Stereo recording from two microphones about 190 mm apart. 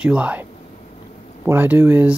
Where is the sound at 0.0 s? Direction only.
5° right (ahead or behind).